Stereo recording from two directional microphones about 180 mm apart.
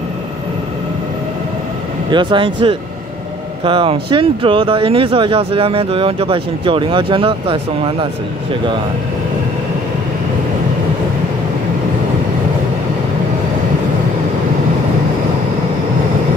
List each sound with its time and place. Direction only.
2.0 s speech: 25° right (ahead or behind)